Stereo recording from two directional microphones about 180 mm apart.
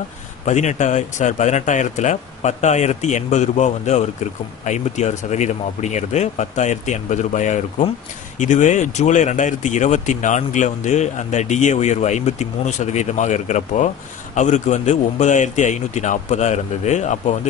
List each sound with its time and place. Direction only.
0.5 s speech: 40° left (ahead or behind)